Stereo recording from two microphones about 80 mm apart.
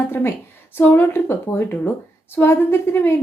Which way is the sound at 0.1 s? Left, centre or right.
Left.